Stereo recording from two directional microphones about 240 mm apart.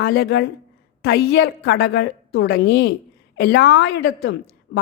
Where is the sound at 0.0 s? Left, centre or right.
Left.